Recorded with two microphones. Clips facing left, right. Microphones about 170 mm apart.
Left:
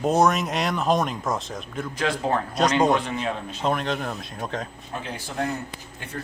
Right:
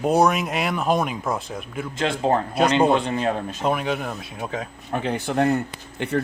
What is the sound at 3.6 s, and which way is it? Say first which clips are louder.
Speech: right 1 dB; 5° right (ahead or behind).